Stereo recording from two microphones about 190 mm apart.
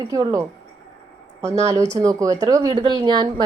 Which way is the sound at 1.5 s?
15° right (ahead or behind).